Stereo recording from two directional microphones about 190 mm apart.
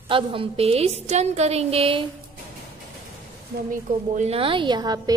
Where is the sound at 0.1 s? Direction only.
25° right (ahead or behind).